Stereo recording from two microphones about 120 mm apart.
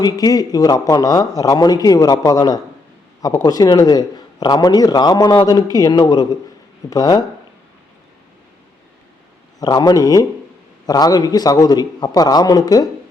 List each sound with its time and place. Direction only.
0.0 s a man's voice: 30° left (ahead or behind)
9.6 s a man's voice: 35° left (ahead or behind)